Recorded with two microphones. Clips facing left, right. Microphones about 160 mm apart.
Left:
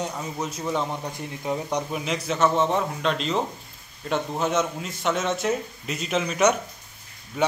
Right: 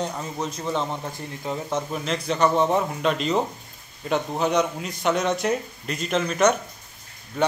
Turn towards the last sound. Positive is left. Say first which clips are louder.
# right 1 dB
turn(degrees=10)  # may be behind; listen again after turning